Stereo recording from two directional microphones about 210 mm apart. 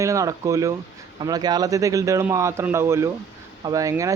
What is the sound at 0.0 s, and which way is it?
Speech, 15° right (ahead or behind).